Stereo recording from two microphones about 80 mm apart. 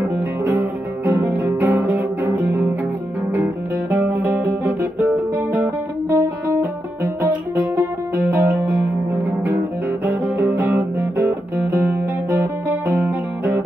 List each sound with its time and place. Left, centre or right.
0.0 s music: right
3.9 s music: right
6.0 s music: right
8.4 s music: right
12.8 s music: right